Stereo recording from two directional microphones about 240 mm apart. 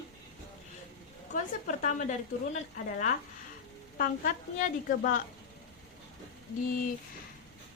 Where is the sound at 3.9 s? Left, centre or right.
Left.